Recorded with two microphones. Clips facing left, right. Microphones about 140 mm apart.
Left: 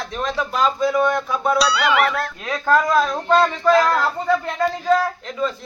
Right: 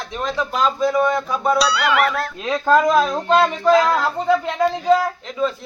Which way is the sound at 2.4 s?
20° right (ahead or behind).